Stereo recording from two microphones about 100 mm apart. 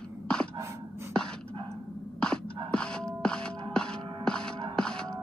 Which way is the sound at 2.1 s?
10° left (ahead or behind).